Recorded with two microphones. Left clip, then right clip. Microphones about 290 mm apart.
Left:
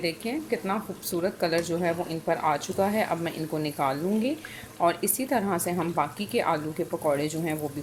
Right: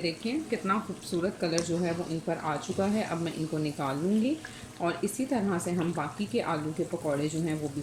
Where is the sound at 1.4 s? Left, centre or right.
Left.